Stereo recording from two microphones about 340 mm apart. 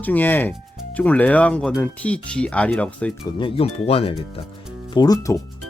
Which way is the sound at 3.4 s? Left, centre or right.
Centre.